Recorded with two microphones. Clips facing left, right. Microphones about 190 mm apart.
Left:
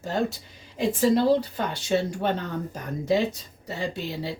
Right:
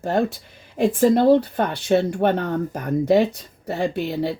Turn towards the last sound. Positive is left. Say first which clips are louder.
# right 7 dB
turn(degrees=-60)  # may be behind; listen again after turning